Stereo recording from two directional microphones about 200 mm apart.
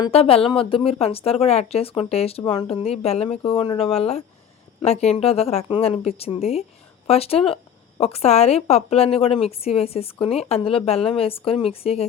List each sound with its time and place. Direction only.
0.0 s speech: 30° left (ahead or behind)